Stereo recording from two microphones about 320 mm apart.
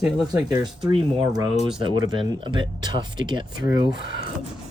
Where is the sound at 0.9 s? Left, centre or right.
Centre.